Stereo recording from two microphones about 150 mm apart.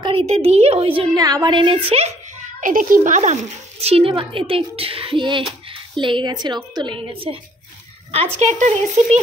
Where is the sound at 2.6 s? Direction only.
65° right (ahead or behind).